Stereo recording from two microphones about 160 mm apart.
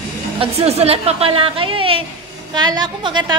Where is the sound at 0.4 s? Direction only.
40° right (ahead or behind).